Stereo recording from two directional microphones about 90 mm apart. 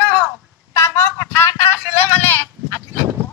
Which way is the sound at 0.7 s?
30° left (ahead or behind).